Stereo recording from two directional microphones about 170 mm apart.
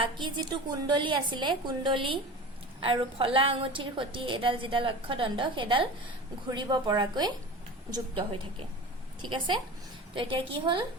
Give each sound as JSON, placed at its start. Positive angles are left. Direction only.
{"t": 0.0, "sound": "a woman's voice", "side_deg": -25}
{"t": 10.2, "sound": "a woman's voice", "side_deg": -30}